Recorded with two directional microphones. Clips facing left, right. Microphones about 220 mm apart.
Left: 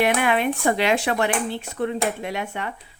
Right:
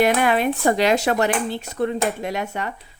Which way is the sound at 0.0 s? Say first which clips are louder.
Right 2 dB; 40° right (ahead or behind).